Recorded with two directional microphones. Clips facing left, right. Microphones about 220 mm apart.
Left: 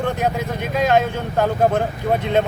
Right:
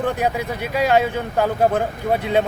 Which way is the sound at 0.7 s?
10° right (ahead or behind).